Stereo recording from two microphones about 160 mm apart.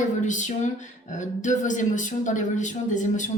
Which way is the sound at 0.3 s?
50° left (ahead or behind).